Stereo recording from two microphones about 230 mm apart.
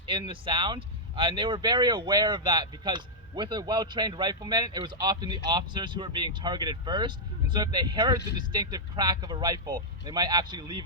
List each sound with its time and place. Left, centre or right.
0.0 s speech: right